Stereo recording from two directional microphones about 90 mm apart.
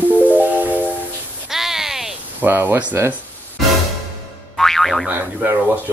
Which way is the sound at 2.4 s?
20° right (ahead or behind).